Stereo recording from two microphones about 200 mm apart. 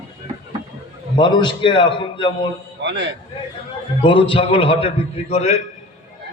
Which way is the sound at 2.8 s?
60° right (ahead or behind).